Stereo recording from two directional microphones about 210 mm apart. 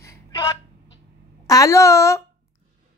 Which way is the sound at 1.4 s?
15° left (ahead or behind).